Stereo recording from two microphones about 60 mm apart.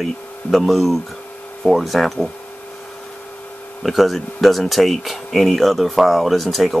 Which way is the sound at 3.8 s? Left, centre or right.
Centre.